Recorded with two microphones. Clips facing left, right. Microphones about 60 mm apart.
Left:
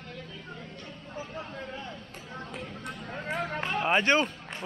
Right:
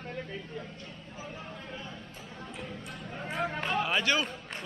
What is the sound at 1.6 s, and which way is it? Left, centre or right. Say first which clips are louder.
Speech: left 4 dB; left.